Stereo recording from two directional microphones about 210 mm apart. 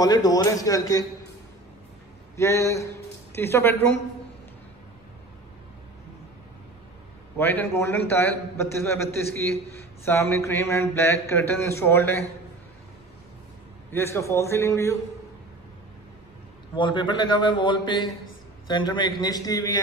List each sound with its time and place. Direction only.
0.0 s a man's voice: 20° left (ahead or behind)
2.3 s a man's voice: 15° left (ahead or behind)
7.3 s a man's voice: 10° left (ahead or behind)
13.9 s a man's voice: 15° left (ahead or behind)
16.7 s a man's voice: 20° left (ahead or behind)